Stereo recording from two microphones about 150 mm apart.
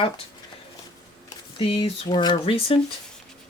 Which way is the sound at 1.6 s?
40° left (ahead or behind).